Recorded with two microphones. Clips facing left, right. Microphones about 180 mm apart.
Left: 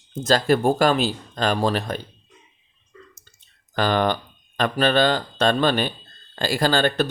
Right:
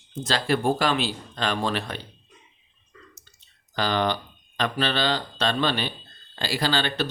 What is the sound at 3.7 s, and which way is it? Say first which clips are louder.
Speech: left 4 dB; 50° left (ahead or behind).